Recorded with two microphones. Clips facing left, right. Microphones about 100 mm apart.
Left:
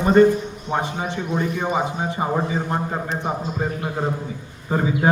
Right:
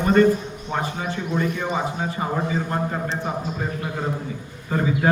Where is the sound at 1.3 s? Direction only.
20° left (ahead or behind).